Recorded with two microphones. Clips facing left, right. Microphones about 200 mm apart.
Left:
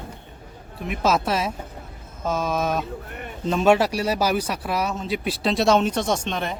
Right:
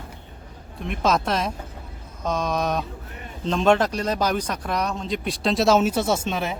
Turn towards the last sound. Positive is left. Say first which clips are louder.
# right 1 dB
turn(degrees=-5)  # may be behind; listen again after turning